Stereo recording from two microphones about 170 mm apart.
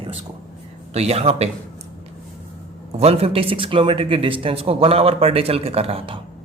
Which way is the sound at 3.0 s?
35° right (ahead or behind).